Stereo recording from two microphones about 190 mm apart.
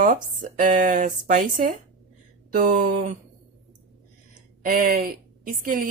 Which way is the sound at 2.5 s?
40° right (ahead or behind).